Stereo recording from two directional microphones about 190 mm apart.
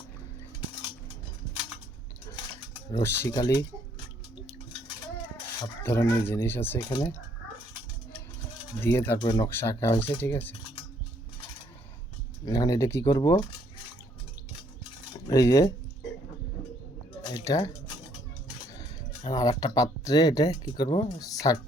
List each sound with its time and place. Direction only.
2.9 s speech: 15° left (ahead or behind)
5.8 s speech: 15° left (ahead or behind)
8.8 s speech: 10° left (ahead or behind)
12.5 s speech: 20° left (ahead or behind)
15.3 s speech: 20° left (ahead or behind)
17.3 s a sound: 15° left (ahead or behind)
19.2 s speech: 20° left (ahead or behind)